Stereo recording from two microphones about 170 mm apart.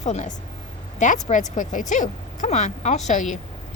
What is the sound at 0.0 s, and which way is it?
A woman's voice, 40° left (ahead or behind).